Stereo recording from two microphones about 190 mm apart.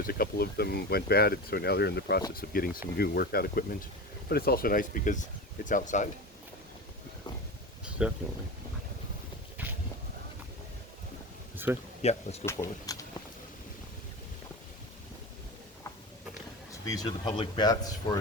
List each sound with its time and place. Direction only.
0.1 s speech: 55° left (ahead or behind)
7.9 s speech: 5° right (ahead or behind)
11.5 s speech: 10° right (ahead or behind)
12.0 s speech: 35° left (ahead or behind)
12.5 s speech: 15° left (ahead or behind)
16.9 s speech: 20° left (ahead or behind)